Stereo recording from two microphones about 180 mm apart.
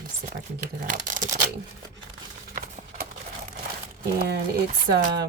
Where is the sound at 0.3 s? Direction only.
50° right (ahead or behind).